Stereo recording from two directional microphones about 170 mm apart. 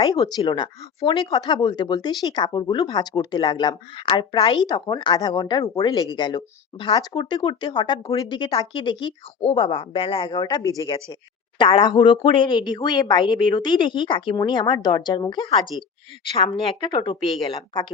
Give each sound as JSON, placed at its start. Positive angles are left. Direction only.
{"t": 0.0, "sound": "speech", "side_deg": 20}